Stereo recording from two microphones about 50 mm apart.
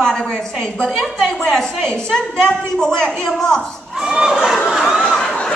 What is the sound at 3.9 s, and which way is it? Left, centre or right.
Crowd, centre.